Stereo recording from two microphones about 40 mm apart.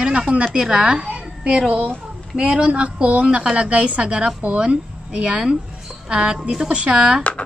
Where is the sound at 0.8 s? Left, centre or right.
Right.